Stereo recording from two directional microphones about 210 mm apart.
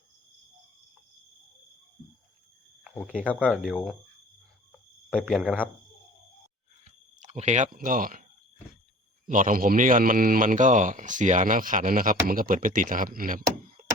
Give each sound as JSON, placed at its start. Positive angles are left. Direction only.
{"t": 3.2, "sound": "speech", "side_deg": 5}
{"t": 5.2, "sound": "speech", "side_deg": 0}
{"t": 6.8, "sound": "a sound", "side_deg": -30}
{"t": 9.2, "sound": "speech", "side_deg": -40}